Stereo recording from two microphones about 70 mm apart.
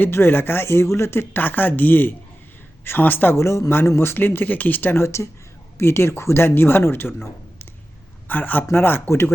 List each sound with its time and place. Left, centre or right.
0.0 s speech: left
3.3 s speech: left
8.3 s speech: left